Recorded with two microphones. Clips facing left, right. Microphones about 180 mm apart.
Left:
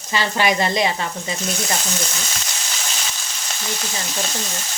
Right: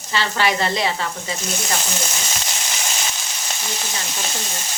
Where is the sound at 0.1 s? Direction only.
15° left (ahead or behind).